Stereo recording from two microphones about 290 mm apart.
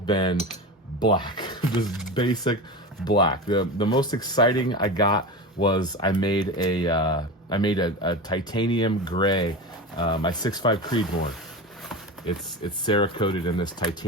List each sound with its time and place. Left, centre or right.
0.0 s speech: centre
12.8 s speech: centre